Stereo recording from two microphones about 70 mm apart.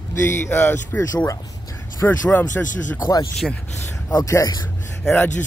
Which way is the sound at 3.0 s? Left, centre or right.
Left.